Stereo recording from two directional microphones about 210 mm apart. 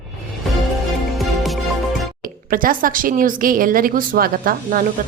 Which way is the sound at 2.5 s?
40° right (ahead or behind).